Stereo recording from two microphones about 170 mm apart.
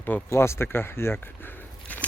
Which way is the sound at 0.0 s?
10° left (ahead or behind).